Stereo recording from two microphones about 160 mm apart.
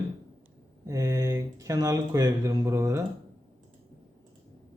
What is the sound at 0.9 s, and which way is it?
Speech, 20° right (ahead or behind).